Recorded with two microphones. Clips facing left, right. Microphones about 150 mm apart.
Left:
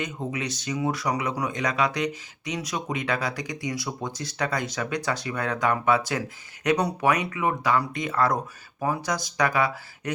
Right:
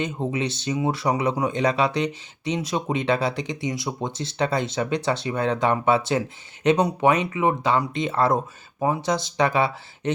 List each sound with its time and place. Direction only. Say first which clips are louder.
0.0 s speech: right 5 dB; 25° right (ahead or behind)